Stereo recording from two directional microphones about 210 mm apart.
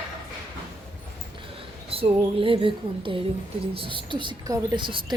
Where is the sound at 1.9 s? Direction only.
25° right (ahead or behind).